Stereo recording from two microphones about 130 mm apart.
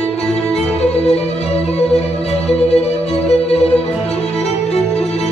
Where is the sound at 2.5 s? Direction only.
55° left (ahead or behind).